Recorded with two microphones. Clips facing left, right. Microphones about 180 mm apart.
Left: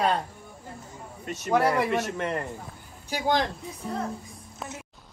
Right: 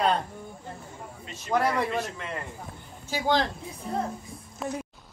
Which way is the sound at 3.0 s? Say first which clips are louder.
Even; 15° left (ahead or behind).